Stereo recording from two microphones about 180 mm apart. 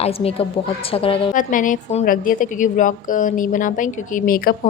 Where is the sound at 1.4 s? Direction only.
45° left (ahead or behind).